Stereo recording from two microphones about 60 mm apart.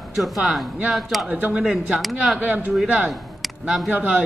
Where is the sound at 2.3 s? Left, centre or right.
Right.